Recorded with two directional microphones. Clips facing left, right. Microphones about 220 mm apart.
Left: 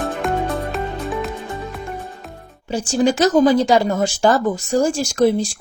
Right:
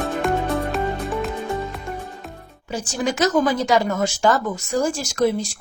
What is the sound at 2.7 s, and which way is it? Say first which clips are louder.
Speech: left 7 dB; 30° left (ahead or behind).